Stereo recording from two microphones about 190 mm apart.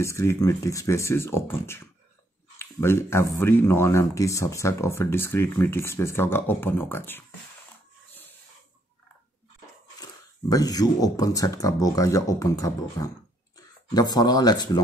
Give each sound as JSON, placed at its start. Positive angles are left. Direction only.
{"t": 0.0, "sound": "speech", "side_deg": 15}
{"t": 10.5, "sound": "speech", "side_deg": 20}